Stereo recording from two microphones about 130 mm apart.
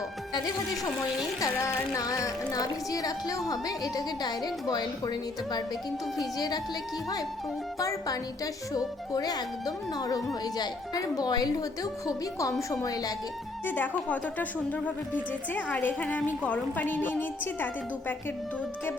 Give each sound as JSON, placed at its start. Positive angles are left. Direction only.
{"t": 1.4, "sound": "speech", "side_deg": 20}
{"t": 7.8, "sound": "speech", "side_deg": 25}
{"t": 13.7, "sound": "a woman's voice", "side_deg": 15}